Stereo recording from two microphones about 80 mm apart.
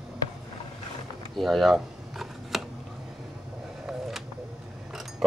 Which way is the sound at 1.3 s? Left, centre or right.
Centre.